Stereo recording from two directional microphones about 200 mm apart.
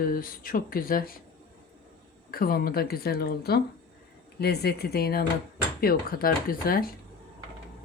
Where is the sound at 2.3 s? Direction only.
50° left (ahead or behind).